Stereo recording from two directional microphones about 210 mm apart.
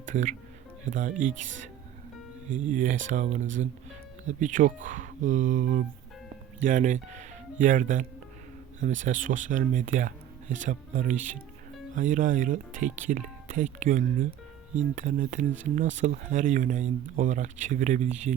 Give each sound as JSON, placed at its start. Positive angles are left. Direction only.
{"t": 0.0, "sound": "music", "side_deg": -35}
{"t": 0.9, "sound": "speech", "side_deg": -40}
{"t": 2.5, "sound": "speech", "side_deg": -40}